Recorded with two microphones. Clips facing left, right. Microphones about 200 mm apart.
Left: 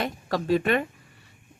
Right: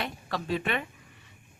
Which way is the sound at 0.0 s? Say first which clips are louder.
Left 6 dB; 45° left (ahead or behind).